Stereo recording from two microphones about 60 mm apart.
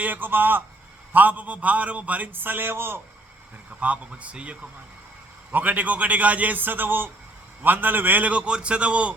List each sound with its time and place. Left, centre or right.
0.0 s a man's voice: right
3.7 s a man's voice: right